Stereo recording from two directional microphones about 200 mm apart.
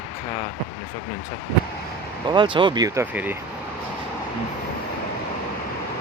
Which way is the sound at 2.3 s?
25° right (ahead or behind).